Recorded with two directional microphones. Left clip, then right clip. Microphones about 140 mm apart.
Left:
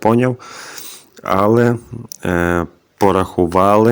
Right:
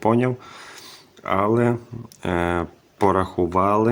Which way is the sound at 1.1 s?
40° left (ahead or behind).